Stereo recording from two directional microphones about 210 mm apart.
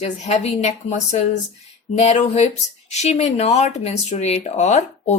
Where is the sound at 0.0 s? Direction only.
30° left (ahead or behind).